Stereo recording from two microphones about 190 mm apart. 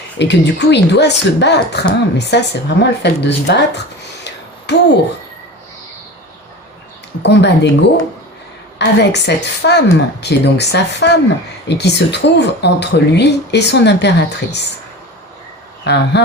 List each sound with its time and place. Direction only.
0.2 s speech: 65° left (ahead or behind)
4.7 s speech: 65° left (ahead or behind)
7.2 s speech: 65° left (ahead or behind)
15.8 s speech: 60° left (ahead or behind)